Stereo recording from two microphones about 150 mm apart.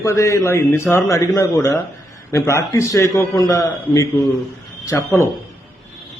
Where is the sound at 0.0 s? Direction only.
20° left (ahead or behind).